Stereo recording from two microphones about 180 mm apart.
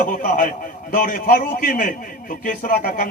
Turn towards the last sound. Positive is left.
turn(degrees=50)  # may be behind; listen again after turning